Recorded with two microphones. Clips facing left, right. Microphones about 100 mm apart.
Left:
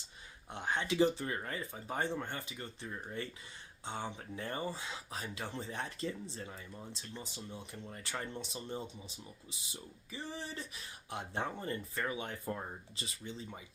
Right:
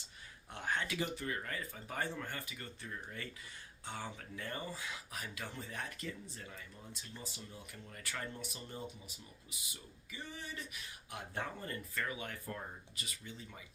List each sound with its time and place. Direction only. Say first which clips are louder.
0.5 s speech: left 4 dB; 20° left (ahead or behind)